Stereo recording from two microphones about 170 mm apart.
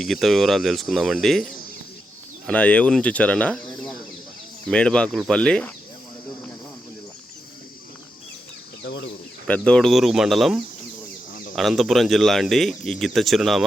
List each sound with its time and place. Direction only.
0.0 s speech: centre (ahead or behind)
2.5 s speech: 10° left (ahead or behind)
8.8 s chicken: 90° left
9.5 s speech: 5° left (ahead or behind)